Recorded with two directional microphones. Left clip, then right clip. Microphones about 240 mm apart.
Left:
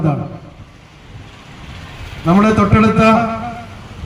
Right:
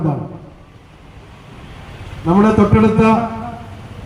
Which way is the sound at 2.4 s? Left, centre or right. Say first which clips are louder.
Even; left.